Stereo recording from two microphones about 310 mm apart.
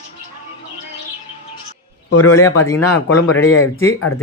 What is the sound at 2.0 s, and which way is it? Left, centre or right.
Speech, left.